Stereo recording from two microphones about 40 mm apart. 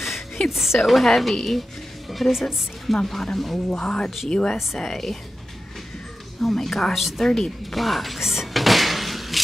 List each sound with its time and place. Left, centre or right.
0.0 s a sound: centre
0.7 s a woman's voice: centre
3.7 s speech: left
6.4 s a woman's voice: centre
6.9 s a woman's voice: centre
7.2 s speech: centre
7.7 s music: centre